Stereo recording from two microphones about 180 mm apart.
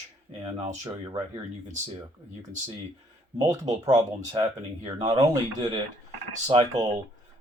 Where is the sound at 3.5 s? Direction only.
20° right (ahead or behind).